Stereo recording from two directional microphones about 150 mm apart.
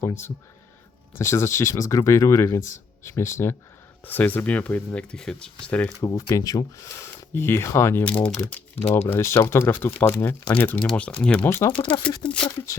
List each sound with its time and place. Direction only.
0.0 s speech: 15° left (ahead or behind)
6.1 s speech: 20° left (ahead or behind)